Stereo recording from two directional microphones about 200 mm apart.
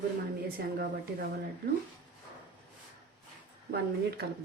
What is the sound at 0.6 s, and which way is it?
Speech, 50° right (ahead or behind).